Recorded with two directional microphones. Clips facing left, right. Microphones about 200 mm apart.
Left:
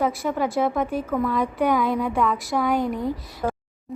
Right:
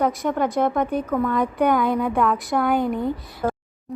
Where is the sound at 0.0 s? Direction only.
5° left (ahead or behind).